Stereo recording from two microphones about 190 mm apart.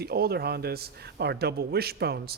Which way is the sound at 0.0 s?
55° right (ahead or behind).